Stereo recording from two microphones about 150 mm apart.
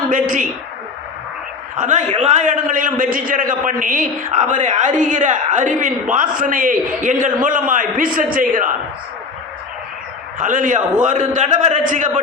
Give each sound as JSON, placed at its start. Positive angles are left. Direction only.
{"t": 0.1, "sound": "a man's voice", "side_deg": -60}
{"t": 1.7, "sound": "a man's voice", "side_deg": -55}
{"t": 10.3, "sound": "a man's voice", "side_deg": -60}